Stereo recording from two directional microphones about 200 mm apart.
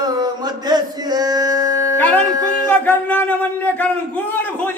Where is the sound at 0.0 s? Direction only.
20° right (ahead or behind).